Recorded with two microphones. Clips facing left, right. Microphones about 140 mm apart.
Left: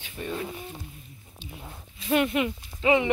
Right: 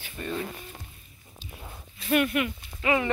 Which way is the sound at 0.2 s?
15° left (ahead or behind).